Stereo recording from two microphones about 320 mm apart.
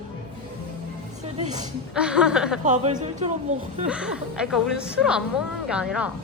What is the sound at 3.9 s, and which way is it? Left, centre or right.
Speech, centre.